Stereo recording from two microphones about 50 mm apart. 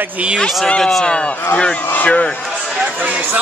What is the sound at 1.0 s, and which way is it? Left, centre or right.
Speech, centre.